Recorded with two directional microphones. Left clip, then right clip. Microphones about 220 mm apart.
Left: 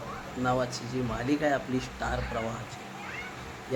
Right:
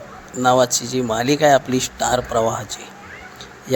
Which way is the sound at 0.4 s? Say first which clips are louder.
Right 14 dB; 35° right (ahead or behind).